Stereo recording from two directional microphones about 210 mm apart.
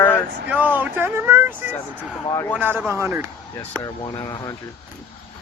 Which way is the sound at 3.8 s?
15° left (ahead or behind).